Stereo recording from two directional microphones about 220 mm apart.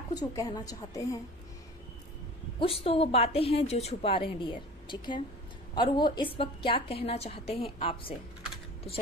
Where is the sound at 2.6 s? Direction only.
25° left (ahead or behind).